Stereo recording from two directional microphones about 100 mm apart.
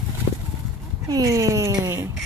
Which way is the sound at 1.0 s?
35° right (ahead or behind).